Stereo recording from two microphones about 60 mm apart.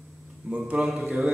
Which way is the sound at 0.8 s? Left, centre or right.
Centre.